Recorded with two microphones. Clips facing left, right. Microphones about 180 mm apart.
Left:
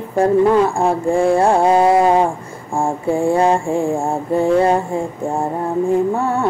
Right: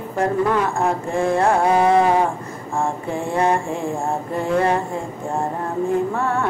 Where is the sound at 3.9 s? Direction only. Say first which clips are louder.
Left 5 dB; 25° left (ahead or behind).